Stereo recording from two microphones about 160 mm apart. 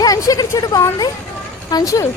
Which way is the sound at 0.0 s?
20° left (ahead or behind).